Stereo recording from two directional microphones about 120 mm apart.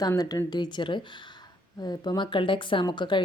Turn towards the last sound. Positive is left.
turn(degrees=40)  # may be behind; listen again after turning